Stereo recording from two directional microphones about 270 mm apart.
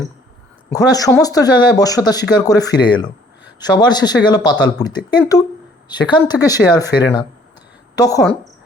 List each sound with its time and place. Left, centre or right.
0.7 s speech: centre
7.9 s speech: centre